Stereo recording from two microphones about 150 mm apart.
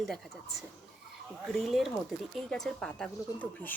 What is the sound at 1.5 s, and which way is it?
Speech, centre (ahead or behind).